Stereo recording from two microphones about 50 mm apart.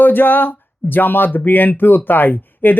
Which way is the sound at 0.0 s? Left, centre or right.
Left.